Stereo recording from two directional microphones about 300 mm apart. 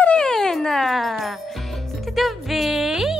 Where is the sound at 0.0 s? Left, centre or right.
Centre.